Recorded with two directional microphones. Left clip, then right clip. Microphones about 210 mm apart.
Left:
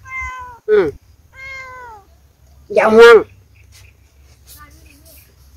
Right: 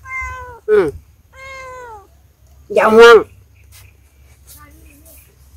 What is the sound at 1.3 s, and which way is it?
Cat, 25° right (ahead or behind).